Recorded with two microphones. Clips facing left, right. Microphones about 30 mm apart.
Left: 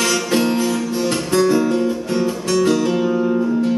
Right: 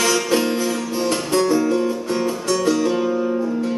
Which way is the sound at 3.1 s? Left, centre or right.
Left.